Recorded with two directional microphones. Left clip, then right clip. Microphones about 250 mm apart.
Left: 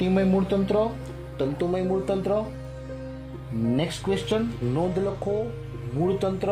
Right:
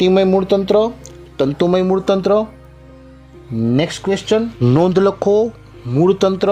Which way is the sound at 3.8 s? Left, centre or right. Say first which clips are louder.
Right 9 dB; right.